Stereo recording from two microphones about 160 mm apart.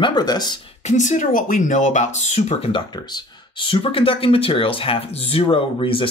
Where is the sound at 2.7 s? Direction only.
25° left (ahead or behind).